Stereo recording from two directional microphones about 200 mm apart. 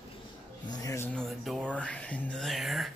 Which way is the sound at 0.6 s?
20° left (ahead or behind).